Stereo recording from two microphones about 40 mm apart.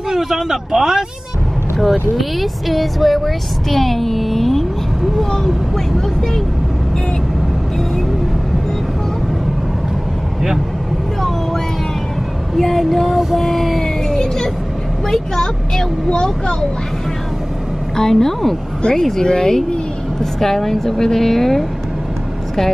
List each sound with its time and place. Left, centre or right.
0.1 s speech: centre
1.8 s a woman's voice: centre
12.5 s child singing: centre
15.0 s a woman's voice: centre
18.1 s speech: centre
18.8 s a woman's voice: centre